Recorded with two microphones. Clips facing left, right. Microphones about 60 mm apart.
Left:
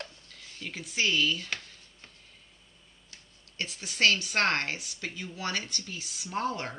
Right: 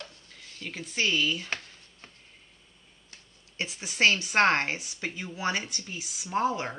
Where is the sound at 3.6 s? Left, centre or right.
Right.